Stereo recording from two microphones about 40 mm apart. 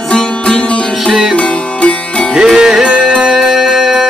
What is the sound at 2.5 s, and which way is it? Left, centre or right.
Music, centre.